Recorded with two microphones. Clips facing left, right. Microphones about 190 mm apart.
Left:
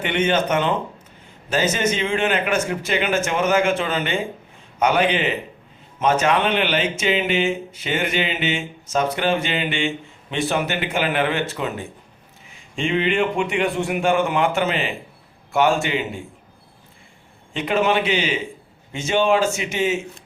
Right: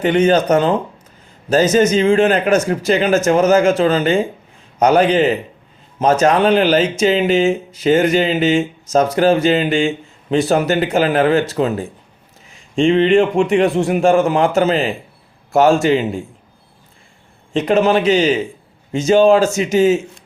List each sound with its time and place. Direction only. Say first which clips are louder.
0.0 s speech: right 7 dB; 40° right (ahead or behind)
17.5 s speech: right 6 dB; 35° right (ahead or behind)